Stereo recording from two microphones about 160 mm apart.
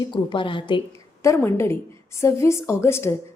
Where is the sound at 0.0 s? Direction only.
30° left (ahead or behind).